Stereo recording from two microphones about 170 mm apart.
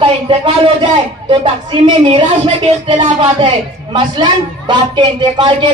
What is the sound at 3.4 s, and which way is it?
A man's voice, 25° right (ahead or behind).